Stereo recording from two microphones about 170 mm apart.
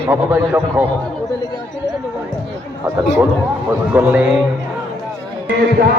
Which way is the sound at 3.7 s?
10° right (ahead or behind).